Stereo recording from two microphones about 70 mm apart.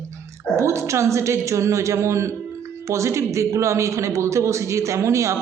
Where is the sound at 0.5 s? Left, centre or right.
Right.